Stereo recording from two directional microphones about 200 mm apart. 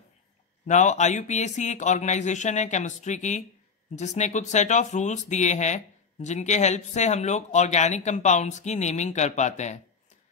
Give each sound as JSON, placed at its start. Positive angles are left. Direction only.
{"t": 0.7, "sound": "speech", "side_deg": 35}